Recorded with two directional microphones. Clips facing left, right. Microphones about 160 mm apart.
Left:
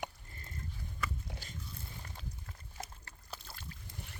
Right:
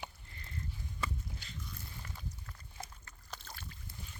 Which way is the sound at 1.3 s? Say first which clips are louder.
Left 3 dB; 80° left.